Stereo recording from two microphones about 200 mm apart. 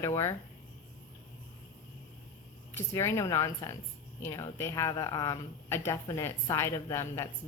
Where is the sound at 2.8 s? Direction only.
15° left (ahead or behind).